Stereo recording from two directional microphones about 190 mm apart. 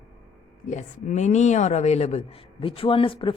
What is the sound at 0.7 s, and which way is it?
A woman's voice, 40° left (ahead or behind).